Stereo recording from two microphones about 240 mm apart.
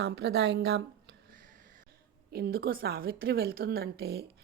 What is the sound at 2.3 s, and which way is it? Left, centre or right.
A woman's voice, right.